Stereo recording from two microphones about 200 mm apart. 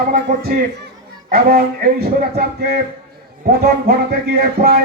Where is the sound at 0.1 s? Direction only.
45° right (ahead or behind).